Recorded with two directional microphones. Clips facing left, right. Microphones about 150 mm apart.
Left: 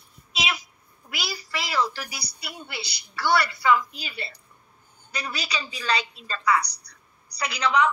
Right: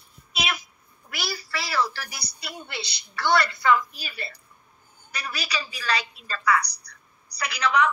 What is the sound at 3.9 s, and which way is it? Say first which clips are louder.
A woman's voice: left 1 dB; 20° left (ahead or behind).